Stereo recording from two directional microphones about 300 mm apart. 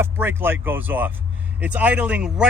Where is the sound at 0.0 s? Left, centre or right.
Centre.